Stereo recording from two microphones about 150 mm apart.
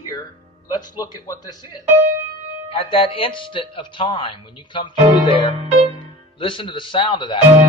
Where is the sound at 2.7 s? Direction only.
35° left (ahead or behind).